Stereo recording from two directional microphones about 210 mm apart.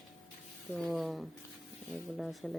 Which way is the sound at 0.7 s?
Centre (ahead or behind).